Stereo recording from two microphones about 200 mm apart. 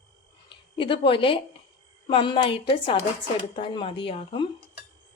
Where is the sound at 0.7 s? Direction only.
25° left (ahead or behind).